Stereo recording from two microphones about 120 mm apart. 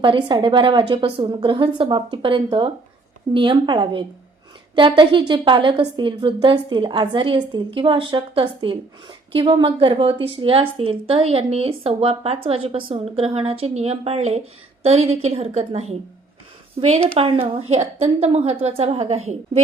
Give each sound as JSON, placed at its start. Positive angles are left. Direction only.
{"t": 0.0, "sound": "a woman's voice", "side_deg": -40}
{"t": 17.3, "sound": "a woman's voice", "side_deg": -55}